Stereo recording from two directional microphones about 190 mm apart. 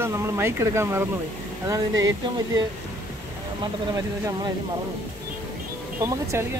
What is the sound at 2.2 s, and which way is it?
Speech, 20° right (ahead or behind).